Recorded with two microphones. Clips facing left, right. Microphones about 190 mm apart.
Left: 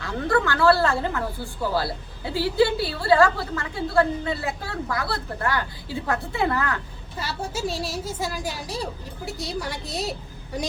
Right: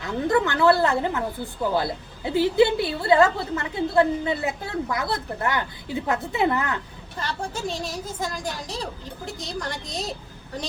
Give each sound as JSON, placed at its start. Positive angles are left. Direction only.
{"t": 0.0, "sound": "a woman's voice", "side_deg": -20}
{"t": 7.2, "sound": "a woman's voice", "side_deg": 5}